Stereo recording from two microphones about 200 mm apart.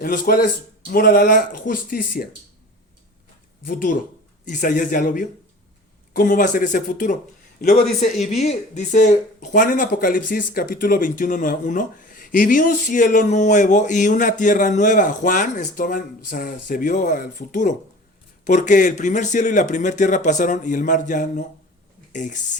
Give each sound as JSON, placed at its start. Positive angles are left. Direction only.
{"t": 0.0, "sound": "speech", "side_deg": 45}
{"t": 3.7, "sound": "speech", "side_deg": 45}